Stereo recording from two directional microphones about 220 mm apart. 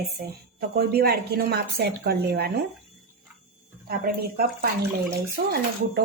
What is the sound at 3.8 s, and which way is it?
A woman's voice, 45° right (ahead or behind).